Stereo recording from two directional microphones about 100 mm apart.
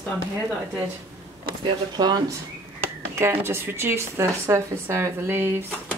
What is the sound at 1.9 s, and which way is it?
Speech, 45° right (ahead or behind).